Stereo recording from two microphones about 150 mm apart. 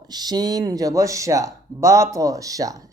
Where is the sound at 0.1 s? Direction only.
25° right (ahead or behind).